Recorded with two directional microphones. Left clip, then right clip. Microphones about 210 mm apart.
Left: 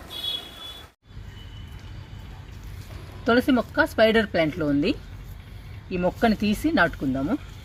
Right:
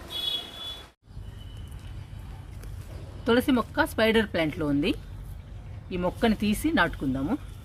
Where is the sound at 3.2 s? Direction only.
10° left (ahead or behind).